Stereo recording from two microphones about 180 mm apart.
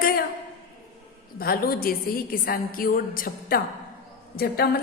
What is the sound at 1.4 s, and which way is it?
A woman's voice, 55° left (ahead or behind).